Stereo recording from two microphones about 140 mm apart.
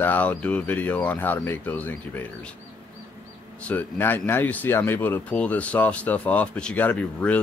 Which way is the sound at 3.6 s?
15° left (ahead or behind).